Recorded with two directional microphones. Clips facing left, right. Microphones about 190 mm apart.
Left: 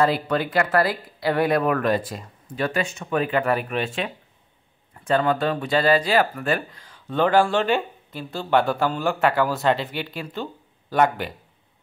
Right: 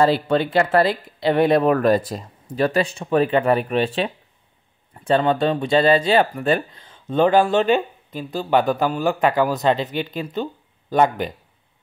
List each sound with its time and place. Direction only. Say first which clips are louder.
0.0 s speech: right 4 dB; 30° right (ahead or behind)